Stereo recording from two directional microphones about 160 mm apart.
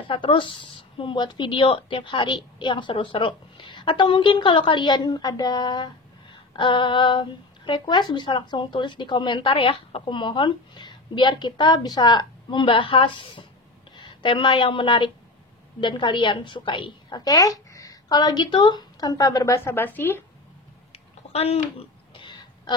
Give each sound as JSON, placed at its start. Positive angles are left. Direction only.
{"t": 0.1, "sound": "a woman's voice", "side_deg": 30}
{"t": 21.3, "sound": "a woman's voice", "side_deg": 40}
{"t": 22.1, "sound": "throat clearing", "side_deg": 30}